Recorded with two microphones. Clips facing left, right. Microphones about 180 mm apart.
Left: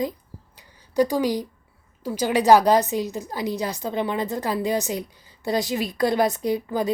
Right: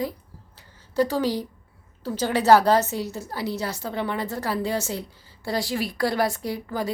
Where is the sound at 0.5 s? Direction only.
15° left (ahead or behind).